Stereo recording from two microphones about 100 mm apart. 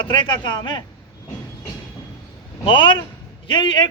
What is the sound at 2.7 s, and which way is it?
A man's voice, 55° left (ahead or behind).